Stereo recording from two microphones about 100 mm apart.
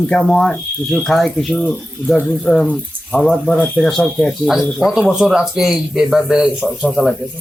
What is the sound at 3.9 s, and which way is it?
Speech, centre (ahead or behind).